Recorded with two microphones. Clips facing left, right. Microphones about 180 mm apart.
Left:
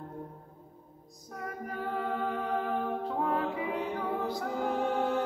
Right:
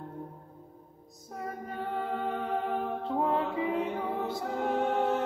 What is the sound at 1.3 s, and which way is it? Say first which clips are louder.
Music: right 1 dB; 25° right (ahead or behind).